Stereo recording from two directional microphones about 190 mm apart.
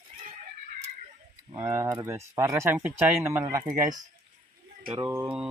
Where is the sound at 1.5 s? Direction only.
15° right (ahead or behind).